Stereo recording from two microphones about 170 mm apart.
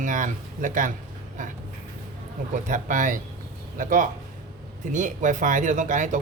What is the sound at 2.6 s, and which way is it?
Speech, 50° right (ahead or behind).